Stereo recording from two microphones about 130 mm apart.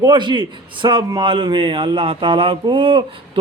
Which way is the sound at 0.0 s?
35° right (ahead or behind).